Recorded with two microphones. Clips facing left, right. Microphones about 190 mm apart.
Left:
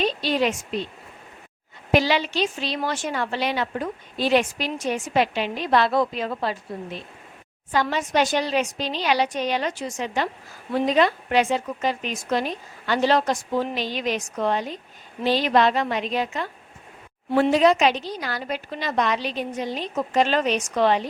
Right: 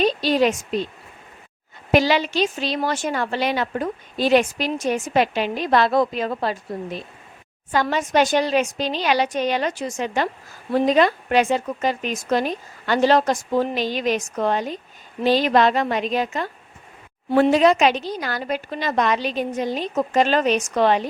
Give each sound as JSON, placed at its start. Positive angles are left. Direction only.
{"t": 0.0, "sound": "a woman's voice", "side_deg": -40}
{"t": 1.9, "sound": "a woman's voice", "side_deg": -45}